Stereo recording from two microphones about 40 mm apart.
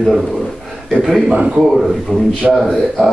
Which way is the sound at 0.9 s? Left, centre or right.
Centre.